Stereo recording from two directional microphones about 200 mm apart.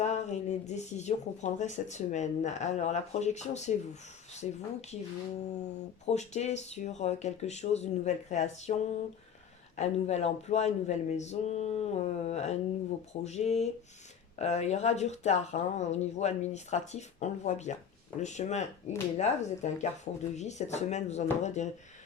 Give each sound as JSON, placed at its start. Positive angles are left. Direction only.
{"t": 0.0, "sound": "speech", "side_deg": 35}